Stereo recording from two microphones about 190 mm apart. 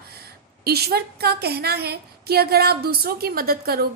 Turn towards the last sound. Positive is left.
turn(degrees=-55)  # may be behind; listen again after turning